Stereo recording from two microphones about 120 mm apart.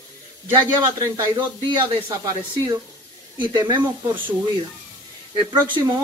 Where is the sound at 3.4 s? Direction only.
40° right (ahead or behind).